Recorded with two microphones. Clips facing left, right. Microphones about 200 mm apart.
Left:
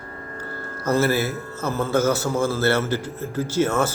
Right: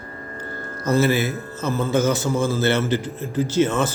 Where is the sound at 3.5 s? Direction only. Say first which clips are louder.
Right 1 dB; 10° left (ahead or behind).